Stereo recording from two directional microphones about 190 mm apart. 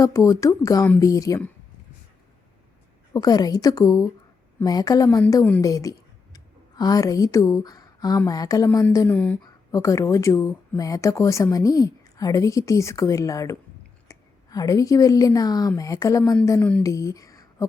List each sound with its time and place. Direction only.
0.0 s speech: 15° left (ahead or behind)
3.1 s a woman's voice: 20° left (ahead or behind)